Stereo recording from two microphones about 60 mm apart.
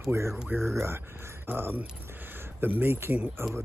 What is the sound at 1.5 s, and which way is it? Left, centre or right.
Speech, right.